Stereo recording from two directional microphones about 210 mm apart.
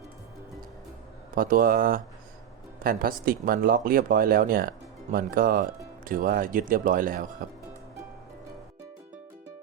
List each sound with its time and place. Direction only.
1.4 s speech: 40° right (ahead or behind)